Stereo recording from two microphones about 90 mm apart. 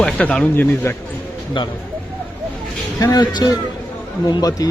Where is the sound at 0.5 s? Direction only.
25° left (ahead or behind).